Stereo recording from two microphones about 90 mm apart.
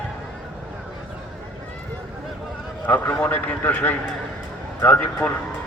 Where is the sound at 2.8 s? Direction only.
20° left (ahead or behind).